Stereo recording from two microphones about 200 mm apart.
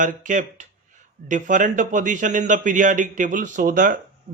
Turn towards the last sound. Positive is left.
turn(degrees=-45)  # may be behind; listen again after turning